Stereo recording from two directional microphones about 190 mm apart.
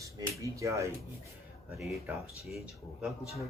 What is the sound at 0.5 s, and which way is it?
Speech, 15° right (ahead or behind).